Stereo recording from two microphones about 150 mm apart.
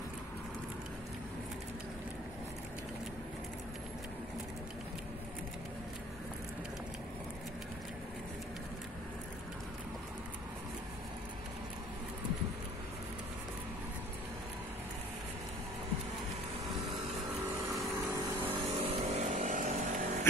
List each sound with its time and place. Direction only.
18.4 s vehicle: 35° right (ahead or behind); by 20.2 s 55° right (ahead or behind)